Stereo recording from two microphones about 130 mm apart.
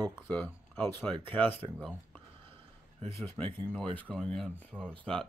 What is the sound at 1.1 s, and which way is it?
Speech, 40° right (ahead or behind).